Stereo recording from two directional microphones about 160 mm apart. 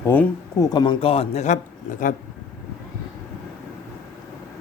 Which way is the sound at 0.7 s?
30° left (ahead or behind).